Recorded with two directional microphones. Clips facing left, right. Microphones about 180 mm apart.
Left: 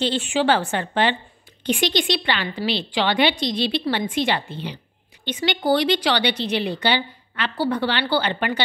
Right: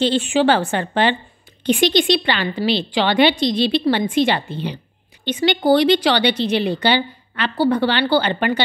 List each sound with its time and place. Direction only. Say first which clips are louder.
0.1 s a woman's voice: right 4 dB; 30° right (ahead or behind)